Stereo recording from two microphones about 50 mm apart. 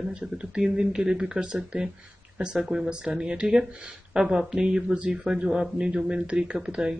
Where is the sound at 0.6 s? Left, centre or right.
Centre.